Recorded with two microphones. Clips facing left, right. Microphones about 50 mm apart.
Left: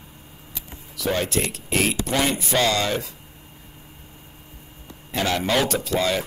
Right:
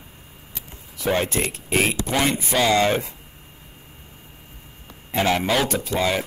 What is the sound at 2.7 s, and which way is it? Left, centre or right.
Speech, right.